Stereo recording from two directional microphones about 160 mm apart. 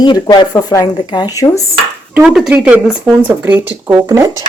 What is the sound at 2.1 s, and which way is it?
Speech, 5° right (ahead or behind).